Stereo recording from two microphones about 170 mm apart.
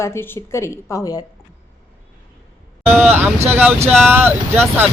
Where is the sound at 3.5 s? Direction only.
10° right (ahead or behind).